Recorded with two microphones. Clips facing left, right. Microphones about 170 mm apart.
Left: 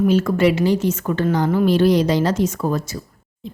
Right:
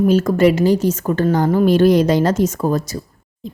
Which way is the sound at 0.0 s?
40° right (ahead or behind).